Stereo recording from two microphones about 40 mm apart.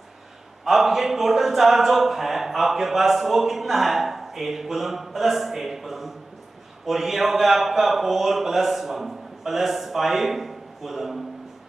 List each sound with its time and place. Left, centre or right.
0.7 s speech: centre